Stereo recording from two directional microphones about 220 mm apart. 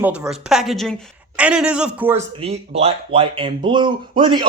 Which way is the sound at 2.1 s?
30° right (ahead or behind).